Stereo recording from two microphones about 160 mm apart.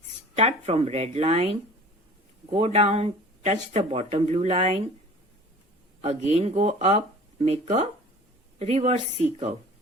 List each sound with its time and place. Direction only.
0.3 s speech: 40° right (ahead or behind)
2.5 s speech: 40° right (ahead or behind)
6.0 s speech: 45° right (ahead or behind)